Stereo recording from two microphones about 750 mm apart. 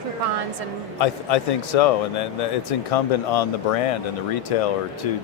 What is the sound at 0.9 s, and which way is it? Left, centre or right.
Speech, left.